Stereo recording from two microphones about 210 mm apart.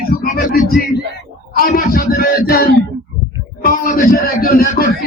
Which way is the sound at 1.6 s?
40° left (ahead or behind).